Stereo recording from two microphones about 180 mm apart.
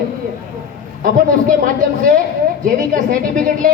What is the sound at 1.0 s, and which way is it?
A woman's voice, 50° right (ahead or behind).